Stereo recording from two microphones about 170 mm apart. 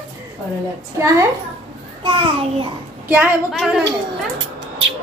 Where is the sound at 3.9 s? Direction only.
90° right.